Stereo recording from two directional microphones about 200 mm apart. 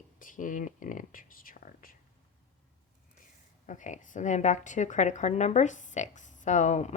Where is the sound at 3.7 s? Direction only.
40° left (ahead or behind).